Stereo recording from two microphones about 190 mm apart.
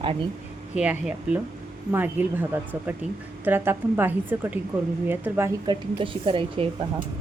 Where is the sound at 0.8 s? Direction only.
5° right (ahead or behind).